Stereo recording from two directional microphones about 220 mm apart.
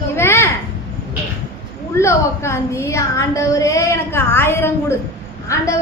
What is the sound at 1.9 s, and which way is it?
A woman's voice, 10° left (ahead or behind).